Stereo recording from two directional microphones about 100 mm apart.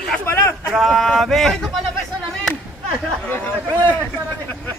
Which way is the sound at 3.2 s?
20° left (ahead or behind).